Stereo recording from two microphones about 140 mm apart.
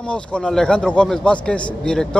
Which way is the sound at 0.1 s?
5° left (ahead or behind).